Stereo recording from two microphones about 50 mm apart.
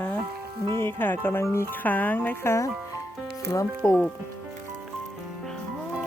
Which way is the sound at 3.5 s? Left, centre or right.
Left.